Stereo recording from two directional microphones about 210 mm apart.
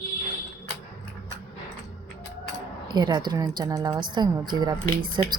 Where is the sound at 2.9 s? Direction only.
20° right (ahead or behind).